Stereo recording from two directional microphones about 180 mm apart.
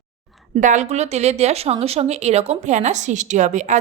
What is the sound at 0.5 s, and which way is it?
A woman's voice, 40° right (ahead or behind).